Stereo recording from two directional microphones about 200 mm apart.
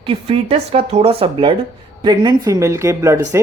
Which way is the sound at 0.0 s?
30° right (ahead or behind).